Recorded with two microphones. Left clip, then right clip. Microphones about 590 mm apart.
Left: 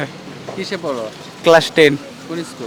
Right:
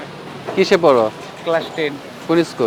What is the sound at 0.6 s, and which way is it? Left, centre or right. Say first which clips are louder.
Speech: right 11 dB; right.